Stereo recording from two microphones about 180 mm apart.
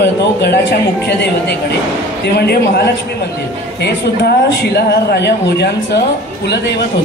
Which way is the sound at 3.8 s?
65° left (ahead or behind).